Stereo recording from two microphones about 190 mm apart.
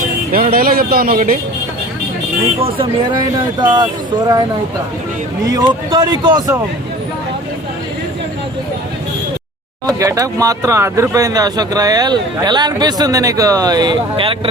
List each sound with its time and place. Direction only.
0.3 s speech: 50° right (ahead or behind)
2.6 s speech: 30° right (ahead or behind)
5.5 s speech: 20° right (ahead or behind)
9.8 s speech: 15° right (ahead or behind)